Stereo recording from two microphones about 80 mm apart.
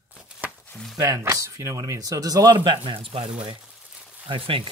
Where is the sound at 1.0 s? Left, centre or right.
Right.